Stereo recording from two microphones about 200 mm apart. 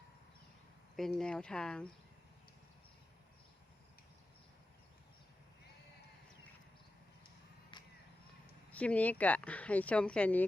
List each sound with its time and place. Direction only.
0.9 s speech: 5° left (ahead or behind)
7.7 s a sound: 25° left (ahead or behind)
8.7 s speech: 5° left (ahead or behind)